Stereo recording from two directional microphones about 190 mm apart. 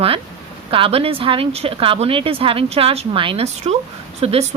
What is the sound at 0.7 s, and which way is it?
A woman's voice, 30° right (ahead or behind).